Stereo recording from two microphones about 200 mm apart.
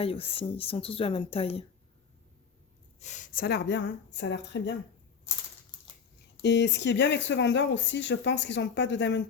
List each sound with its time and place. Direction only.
0.0 s speech: 30° left (ahead or behind)
3.0 s speech: 40° left (ahead or behind); by 4.7 s 60° left (ahead or behind)
6.4 s speech: 60° left (ahead or behind)